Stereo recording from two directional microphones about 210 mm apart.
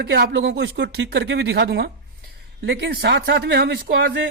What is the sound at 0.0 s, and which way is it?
A man's voice, 50° right (ahead or behind).